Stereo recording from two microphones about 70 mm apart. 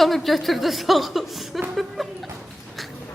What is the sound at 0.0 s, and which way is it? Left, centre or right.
A woman's voice, centre.